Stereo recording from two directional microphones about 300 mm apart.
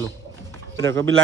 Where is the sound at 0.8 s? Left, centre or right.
Right.